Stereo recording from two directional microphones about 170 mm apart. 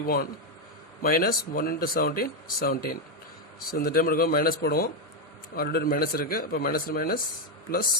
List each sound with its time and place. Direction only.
0.0 s speech: 60° left (ahead or behind)